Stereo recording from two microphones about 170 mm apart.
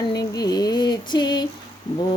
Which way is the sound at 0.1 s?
20° left (ahead or behind).